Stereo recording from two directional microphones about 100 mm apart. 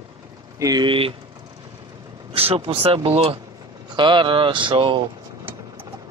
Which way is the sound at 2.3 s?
75° right (ahead or behind).